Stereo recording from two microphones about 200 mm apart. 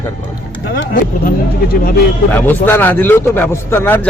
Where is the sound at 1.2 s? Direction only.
45° left (ahead or behind).